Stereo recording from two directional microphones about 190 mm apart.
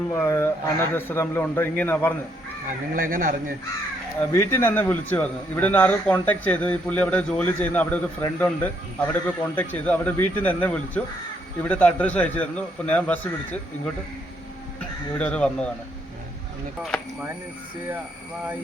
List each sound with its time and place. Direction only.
0.1 s a man's voice: 15° left (ahead or behind)
2.9 s speech: 45° right (ahead or behind)
4.3 s a man's voice: 10° left (ahead or behind)
15.2 s speech: 5° left (ahead or behind)